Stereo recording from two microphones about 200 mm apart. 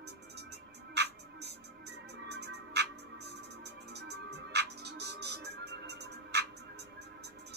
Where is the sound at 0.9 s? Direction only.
55° right (ahead or behind).